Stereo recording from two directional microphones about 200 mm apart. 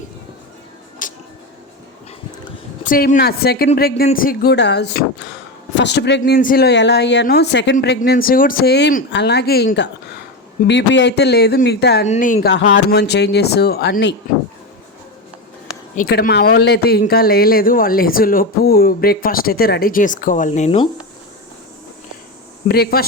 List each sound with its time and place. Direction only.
1.0 s music: 40° left (ahead or behind)
2.8 s a man's voice: 40° left (ahead or behind)
12.0 s speech: 40° left (ahead or behind)
12.5 s speech: 65° left (ahead or behind)
16.0 s a man's voice: 45° left (ahead or behind)
22.7 s a man's voice: 50° left (ahead or behind)